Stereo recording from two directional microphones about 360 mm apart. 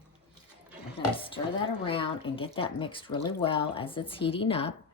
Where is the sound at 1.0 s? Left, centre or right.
Centre.